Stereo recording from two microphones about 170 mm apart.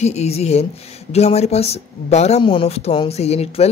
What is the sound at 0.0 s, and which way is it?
Speech, 40° left (ahead or behind).